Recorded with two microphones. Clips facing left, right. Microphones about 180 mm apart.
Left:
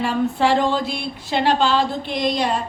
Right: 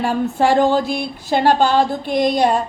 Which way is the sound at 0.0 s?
50° right (ahead or behind).